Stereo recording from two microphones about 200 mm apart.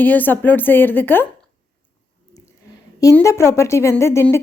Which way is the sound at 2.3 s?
15° left (ahead or behind).